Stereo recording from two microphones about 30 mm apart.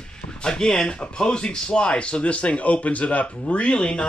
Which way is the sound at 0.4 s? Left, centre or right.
Left.